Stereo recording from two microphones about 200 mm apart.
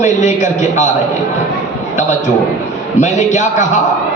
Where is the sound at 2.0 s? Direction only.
35° left (ahead or behind).